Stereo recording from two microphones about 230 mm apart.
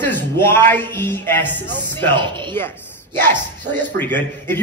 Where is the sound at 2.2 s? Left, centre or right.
Right.